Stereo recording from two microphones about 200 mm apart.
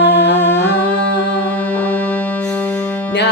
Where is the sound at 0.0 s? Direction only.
60° left (ahead or behind).